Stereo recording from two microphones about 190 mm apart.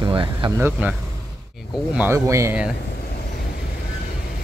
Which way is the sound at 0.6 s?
10° right (ahead or behind).